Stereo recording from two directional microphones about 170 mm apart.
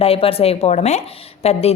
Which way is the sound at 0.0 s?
35° left (ahead or behind).